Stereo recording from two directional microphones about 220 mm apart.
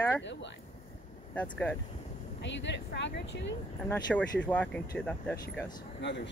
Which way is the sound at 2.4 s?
55° left (ahead or behind).